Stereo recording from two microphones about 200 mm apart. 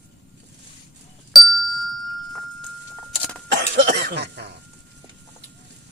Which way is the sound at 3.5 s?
55° right (ahead or behind).